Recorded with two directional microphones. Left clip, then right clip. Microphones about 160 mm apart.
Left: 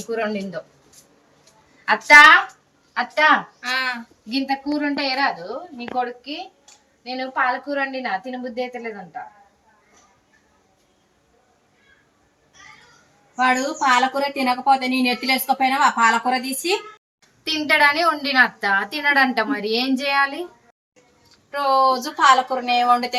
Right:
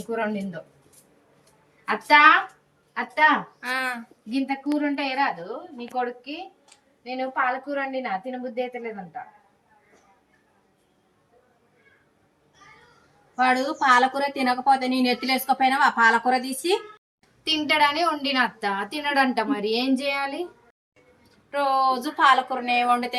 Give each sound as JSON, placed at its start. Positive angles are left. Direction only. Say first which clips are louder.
{"t": 0.1, "sound": "a woman's voice", "louder": "left 3 dB", "side_deg": -5}
{"t": 1.9, "sound": "a woman's voice", "louder": "left 6 dB", "side_deg": -5}
{"t": 3.6, "sound": "speech", "louder": "left 4 dB", "side_deg": -85}
{"t": 4.3, "sound": "a woman's voice", "louder": "left 3 dB", "side_deg": 5}
{"t": 13.3, "sound": "a woman's voice", "louder": "left 2 dB", "side_deg": 10}
{"t": 17.4, "sound": "a woman's voice", "louder": "left 4 dB", "side_deg": -5}
{"t": 21.5, "sound": "speech", "louder": "left 4 dB", "side_deg": -15}